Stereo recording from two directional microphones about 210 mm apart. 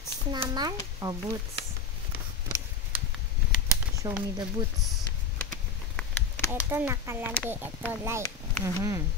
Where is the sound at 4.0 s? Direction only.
15° right (ahead or behind).